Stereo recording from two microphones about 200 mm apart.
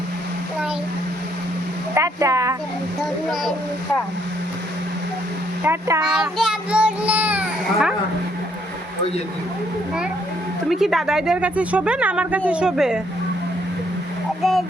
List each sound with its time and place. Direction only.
2.0 s speech: 15° right (ahead or behind)
5.6 s a child's voice: 10° right (ahead or behind)
10.7 s speech: centre (ahead or behind)
14.4 s speech: centre (ahead or behind)